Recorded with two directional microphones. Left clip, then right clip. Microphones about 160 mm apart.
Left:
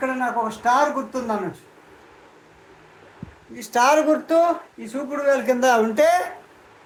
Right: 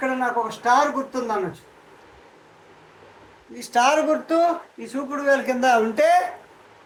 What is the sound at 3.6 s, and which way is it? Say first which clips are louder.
Speech: left 1 dB; 25° left (ahead or behind).